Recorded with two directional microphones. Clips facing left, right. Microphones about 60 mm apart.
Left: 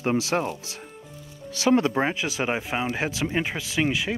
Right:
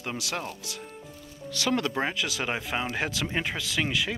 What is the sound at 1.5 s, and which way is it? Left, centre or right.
Speech, left.